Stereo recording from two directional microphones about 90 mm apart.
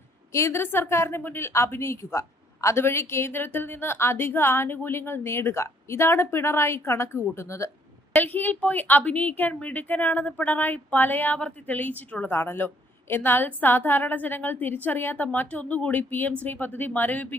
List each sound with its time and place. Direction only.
0.3 s a woman's voice: 30° left (ahead or behind)
8.1 s a woman's voice: 20° left (ahead or behind)